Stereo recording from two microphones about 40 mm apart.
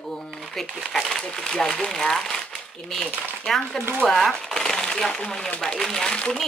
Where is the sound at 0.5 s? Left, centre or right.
Centre.